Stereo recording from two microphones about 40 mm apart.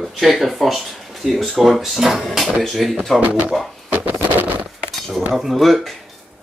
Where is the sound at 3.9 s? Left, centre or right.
Right.